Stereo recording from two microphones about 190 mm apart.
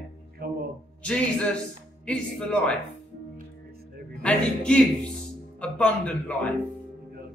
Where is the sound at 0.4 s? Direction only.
50° right (ahead or behind).